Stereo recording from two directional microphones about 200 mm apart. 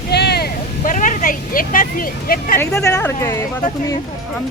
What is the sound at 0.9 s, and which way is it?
Speech, 40° left (ahead or behind).